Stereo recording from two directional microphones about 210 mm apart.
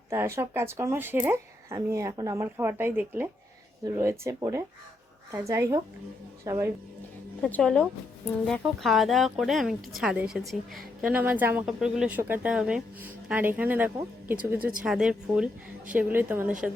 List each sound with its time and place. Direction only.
0.1 s a woman's voice: 15° right (ahead or behind)
7.4 s a woman's voice: 5° left (ahead or behind)